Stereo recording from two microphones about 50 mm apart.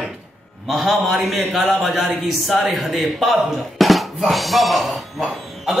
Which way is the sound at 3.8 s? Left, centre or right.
Centre.